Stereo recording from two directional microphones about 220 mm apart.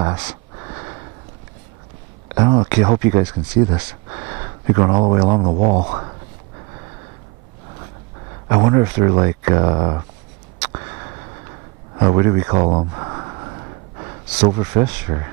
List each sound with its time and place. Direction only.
0.0 s speech: 20° right (ahead or behind)
2.3 s speech: 20° right (ahead or behind)
8.5 s speech: 20° right (ahead or behind)
12.0 s speech: 20° right (ahead or behind)
14.4 s speech: 20° right (ahead or behind)